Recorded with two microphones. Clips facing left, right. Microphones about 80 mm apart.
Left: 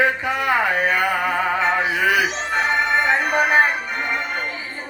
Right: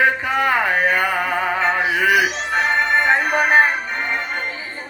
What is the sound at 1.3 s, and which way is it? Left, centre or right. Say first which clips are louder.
Music: even; right.